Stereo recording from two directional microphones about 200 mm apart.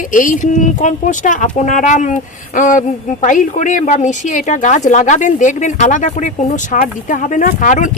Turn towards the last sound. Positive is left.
turn(degrees=40)  # may be behind; listen again after turning